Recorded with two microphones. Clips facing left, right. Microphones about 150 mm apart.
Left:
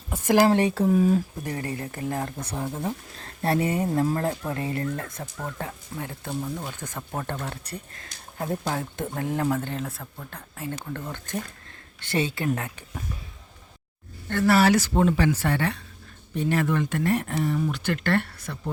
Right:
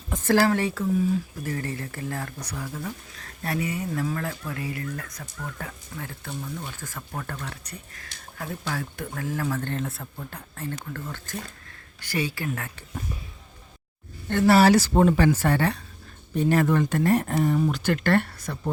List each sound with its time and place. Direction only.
0.1 s speech: 15° left (ahead or behind)
0.9 s speech: 60° left (ahead or behind)
1.5 s speech: 20° left (ahead or behind)
9.6 s speech: 5° left (ahead or behind)
10.5 s speech: 10° left (ahead or behind)
14.3 s speech: 25° right (ahead or behind); by 18.7 s 45° right (ahead or behind)